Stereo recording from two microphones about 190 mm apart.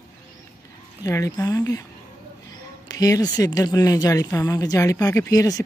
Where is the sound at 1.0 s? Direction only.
15° left (ahead or behind).